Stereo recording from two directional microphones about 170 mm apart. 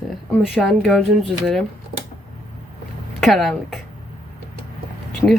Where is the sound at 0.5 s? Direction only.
Centre (ahead or behind).